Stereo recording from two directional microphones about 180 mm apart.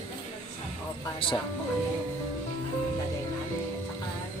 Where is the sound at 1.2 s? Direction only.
30° left (ahead or behind).